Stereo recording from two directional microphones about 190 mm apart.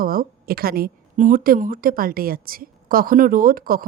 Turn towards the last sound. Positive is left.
turn(degrees=-50)  # may be behind; listen again after turning